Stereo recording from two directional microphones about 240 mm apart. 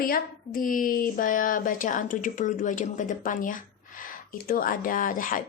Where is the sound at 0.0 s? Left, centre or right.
Left.